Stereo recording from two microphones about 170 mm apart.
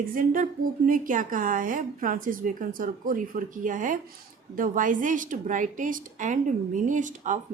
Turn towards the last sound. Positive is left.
turn(degrees=-45)  # may be behind; listen again after turning